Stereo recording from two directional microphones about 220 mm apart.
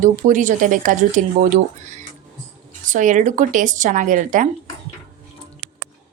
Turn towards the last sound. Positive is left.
turn(degrees=-35)  # may be behind; listen again after turning